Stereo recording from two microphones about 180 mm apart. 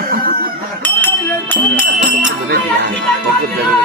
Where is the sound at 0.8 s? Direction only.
10° left (ahead or behind).